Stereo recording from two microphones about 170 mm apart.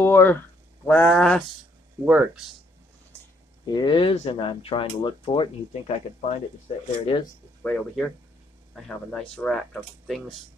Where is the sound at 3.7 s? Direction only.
25° left (ahead or behind).